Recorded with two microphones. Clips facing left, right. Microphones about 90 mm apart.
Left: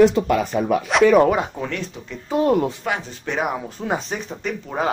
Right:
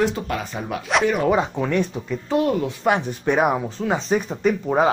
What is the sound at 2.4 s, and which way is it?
Speech, 45° left (ahead or behind).